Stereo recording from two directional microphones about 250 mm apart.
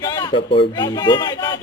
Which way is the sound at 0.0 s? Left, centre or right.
Centre.